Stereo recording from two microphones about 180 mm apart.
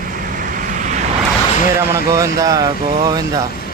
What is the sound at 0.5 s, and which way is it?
Vehicle, 45° right (ahead or behind).